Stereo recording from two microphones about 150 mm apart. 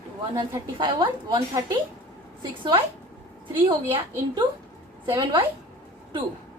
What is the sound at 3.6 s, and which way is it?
A woman's voice, 35° right (ahead or behind).